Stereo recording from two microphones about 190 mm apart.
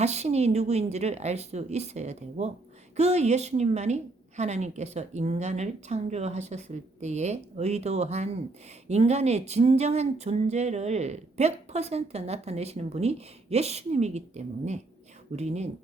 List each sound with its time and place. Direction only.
0.0 s speech: 35° right (ahead or behind)